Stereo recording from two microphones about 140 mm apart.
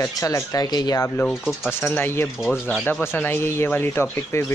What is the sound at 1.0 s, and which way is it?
Speech, 10° left (ahead or behind).